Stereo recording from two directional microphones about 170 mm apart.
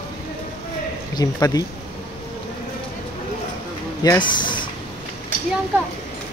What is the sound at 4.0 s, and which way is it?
Speech, 25° left (ahead or behind).